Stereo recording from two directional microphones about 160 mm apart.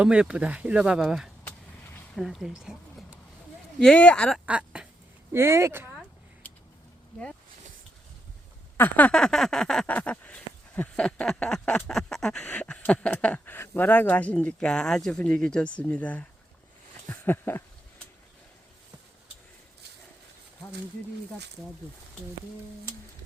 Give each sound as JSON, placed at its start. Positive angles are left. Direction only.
{"t": 0.0, "sound": "speech", "side_deg": -5}
{"t": 3.8, "sound": "speech", "side_deg": 5}
{"t": 4.4, "sound": "duck", "side_deg": -5}
{"t": 5.3, "sound": "speech", "side_deg": -15}
{"t": 5.9, "sound": "a sound", "side_deg": 5}
{"t": 8.8, "sound": "a sound", "side_deg": 10}